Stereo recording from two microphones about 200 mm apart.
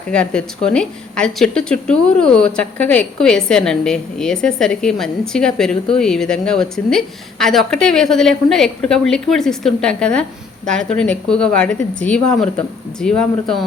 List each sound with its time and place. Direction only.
0.1 s speech: 5° left (ahead or behind)